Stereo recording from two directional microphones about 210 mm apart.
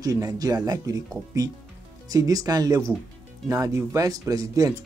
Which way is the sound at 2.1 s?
15° right (ahead or behind).